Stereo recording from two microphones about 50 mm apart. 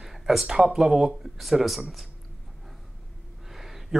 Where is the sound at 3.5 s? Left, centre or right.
Centre.